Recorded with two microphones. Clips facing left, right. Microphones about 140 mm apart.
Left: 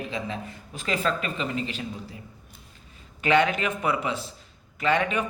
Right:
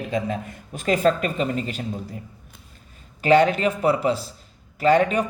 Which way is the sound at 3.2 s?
40° right (ahead or behind).